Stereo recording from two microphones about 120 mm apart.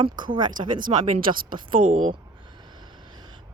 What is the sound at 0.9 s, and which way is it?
Speech, 60° right (ahead or behind).